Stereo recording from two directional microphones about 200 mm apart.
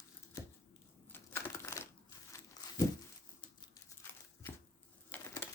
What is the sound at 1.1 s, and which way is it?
Crumpling, 15° left (ahead or behind).